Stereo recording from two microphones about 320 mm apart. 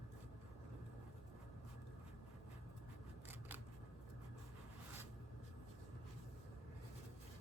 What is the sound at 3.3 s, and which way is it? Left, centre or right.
Scissors, centre.